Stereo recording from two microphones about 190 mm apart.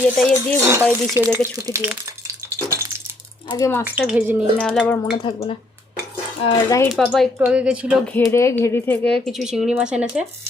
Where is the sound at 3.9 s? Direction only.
10° right (ahead or behind).